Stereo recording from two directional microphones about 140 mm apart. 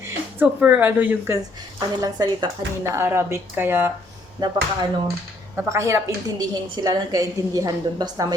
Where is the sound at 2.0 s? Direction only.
25° right (ahead or behind).